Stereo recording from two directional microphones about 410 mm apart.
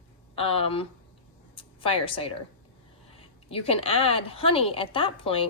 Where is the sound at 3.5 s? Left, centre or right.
Centre.